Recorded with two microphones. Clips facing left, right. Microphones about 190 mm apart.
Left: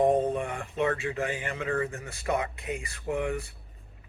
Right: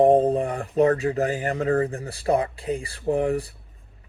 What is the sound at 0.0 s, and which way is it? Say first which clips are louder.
Speech: right 7 dB; 30° right (ahead or behind).